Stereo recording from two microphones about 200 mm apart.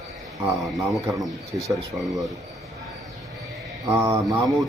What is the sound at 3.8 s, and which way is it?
Speech, 10° right (ahead or behind).